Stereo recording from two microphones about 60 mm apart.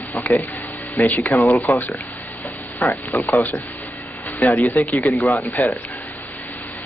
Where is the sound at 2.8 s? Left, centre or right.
Left.